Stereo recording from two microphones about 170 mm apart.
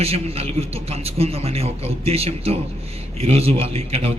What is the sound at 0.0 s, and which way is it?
A man's voice, 35° right (ahead or behind).